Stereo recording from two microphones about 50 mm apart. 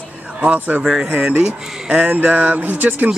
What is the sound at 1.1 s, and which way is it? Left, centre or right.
Speech, right.